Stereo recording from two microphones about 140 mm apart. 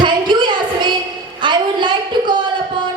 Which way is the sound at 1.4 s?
35° right (ahead or behind).